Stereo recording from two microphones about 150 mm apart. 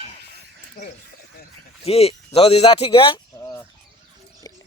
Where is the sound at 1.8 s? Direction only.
40° left (ahead or behind).